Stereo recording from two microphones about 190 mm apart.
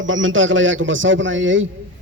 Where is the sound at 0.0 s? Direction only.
90° right.